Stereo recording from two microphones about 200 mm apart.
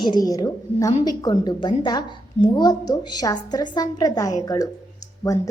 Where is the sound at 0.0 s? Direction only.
20° left (ahead or behind).